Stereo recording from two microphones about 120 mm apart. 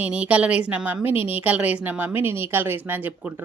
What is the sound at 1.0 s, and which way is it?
Speech, 50° left (ahead or behind).